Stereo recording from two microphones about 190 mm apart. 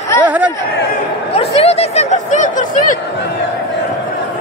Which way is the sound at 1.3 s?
35° left (ahead or behind).